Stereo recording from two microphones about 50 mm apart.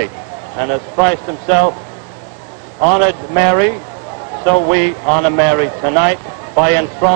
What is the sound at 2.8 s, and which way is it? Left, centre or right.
A man's voice, centre.